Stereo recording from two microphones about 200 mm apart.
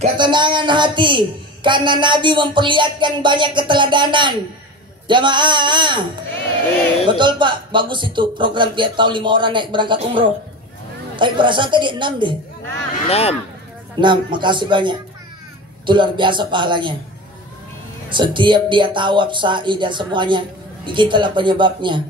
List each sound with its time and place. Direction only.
0.0 s a man's voice: 25° right (ahead or behind)
7.1 s a man's voice: 25° right (ahead or behind)
13.1 s speech: 30° left (ahead or behind)
13.9 s a man's voice: 25° right (ahead or behind)
18.1 s a man's voice: 25° right (ahead or behind)